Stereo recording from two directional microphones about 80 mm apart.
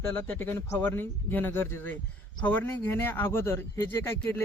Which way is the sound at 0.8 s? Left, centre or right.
Left.